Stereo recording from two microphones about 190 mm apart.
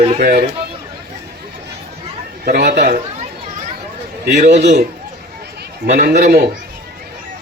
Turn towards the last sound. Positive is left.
turn(degrees=-55)  # may be behind; listen again after turning